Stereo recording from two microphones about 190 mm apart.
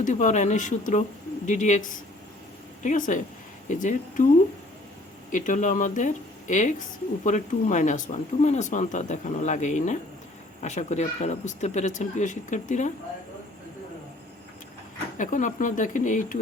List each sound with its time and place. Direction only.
0.0 s speech: 40° left (ahead or behind)
5.3 s speech: 40° left (ahead or behind)
15.2 s speech: 40° left (ahead or behind)